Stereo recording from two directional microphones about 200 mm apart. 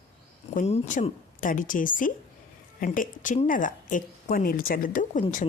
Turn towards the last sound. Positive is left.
turn(degrees=40)  # may be behind; listen again after turning